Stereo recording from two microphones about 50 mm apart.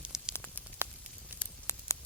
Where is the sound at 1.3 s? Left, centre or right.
Right.